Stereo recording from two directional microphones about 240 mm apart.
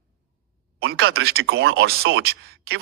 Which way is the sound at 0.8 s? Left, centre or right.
Right.